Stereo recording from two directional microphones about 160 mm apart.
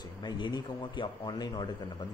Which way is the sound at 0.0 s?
25° left (ahead or behind).